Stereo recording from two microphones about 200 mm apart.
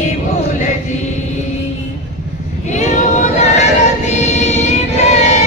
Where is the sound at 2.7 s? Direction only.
35° left (ahead or behind).